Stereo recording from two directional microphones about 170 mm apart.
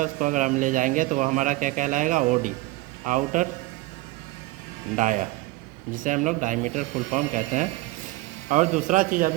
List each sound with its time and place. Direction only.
0.0 s a man's voice: 50° right (ahead or behind)
4.9 s a man's voice: 50° right (ahead or behind)